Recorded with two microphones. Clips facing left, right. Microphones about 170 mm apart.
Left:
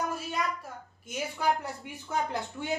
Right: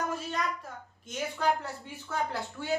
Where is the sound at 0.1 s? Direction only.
10° left (ahead or behind).